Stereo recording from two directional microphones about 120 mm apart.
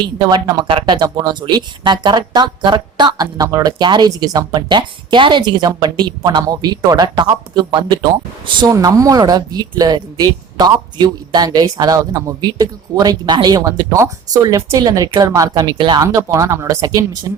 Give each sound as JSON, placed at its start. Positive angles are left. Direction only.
{"t": 0.0, "sound": "a woman's voice", "side_deg": -35}